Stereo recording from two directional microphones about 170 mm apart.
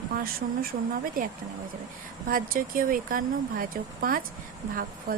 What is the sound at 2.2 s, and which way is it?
Speech, 55° right (ahead or behind).